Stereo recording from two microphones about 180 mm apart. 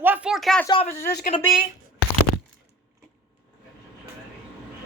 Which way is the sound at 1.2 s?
35° left (ahead or behind).